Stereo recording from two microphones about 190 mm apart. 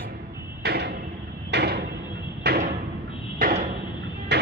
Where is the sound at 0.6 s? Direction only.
60° right (ahead or behind).